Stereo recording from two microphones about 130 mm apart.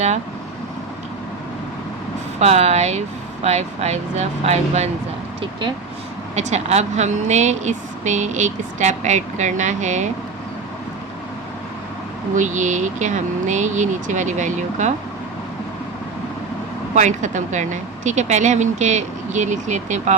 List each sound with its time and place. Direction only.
2.4 s speech: 55° right (ahead or behind)
5.4 s speech: 40° right (ahead or behind)
6.3 s speech: 60° right (ahead or behind)
12.4 s speech: 70° right (ahead or behind)
16.9 s speech: 70° right (ahead or behind)